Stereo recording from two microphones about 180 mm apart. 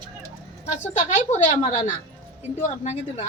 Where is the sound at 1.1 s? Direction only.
40° left (ahead or behind).